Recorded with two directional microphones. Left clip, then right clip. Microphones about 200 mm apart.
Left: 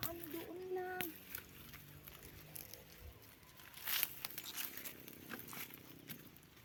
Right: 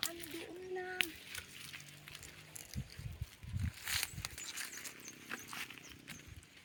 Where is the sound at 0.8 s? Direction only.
30° left (ahead or behind).